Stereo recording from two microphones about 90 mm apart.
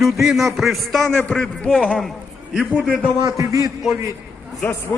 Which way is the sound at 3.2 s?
35° right (ahead or behind).